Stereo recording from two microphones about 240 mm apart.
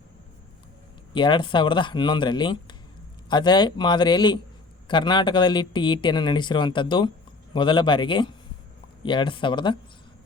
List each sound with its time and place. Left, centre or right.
1.1 s speech: centre